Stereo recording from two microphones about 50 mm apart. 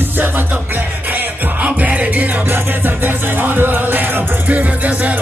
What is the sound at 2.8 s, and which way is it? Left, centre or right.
Music, right.